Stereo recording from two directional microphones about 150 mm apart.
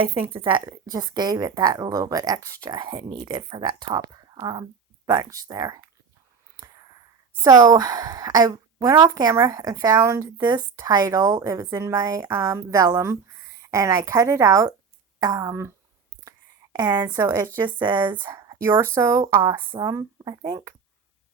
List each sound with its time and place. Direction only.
0.0 s a woman's voice: 35° right (ahead or behind)
7.4 s a woman's voice: 25° right (ahead or behind)
16.7 s a woman's voice: 30° right (ahead or behind)
18.3 s a sound: 20° right (ahead or behind)
18.9 s a woman's voice: 20° right (ahead or behind)